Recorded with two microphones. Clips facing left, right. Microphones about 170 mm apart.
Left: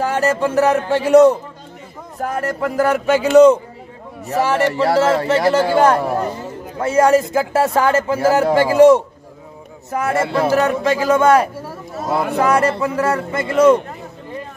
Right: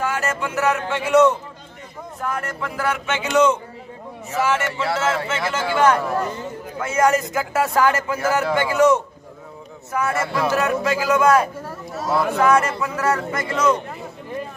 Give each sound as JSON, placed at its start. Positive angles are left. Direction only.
{"t": 0.0, "sound": "a man's voice", "side_deg": 35}
{"t": 11.6, "sound": "a sound", "side_deg": 10}
{"t": 12.4, "sound": "a man's voice", "side_deg": 30}